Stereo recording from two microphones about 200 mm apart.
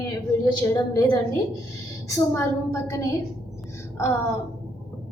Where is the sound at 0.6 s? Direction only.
15° left (ahead or behind).